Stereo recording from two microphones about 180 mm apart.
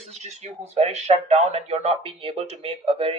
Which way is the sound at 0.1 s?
40° right (ahead or behind).